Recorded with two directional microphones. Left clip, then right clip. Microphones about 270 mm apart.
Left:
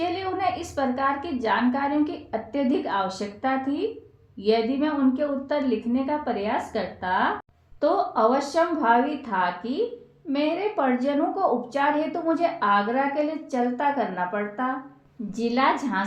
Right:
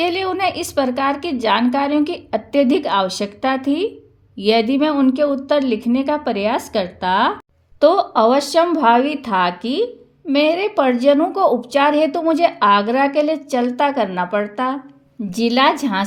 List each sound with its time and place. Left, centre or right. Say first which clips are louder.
0.0 s a woman's voice: right 7 dB; right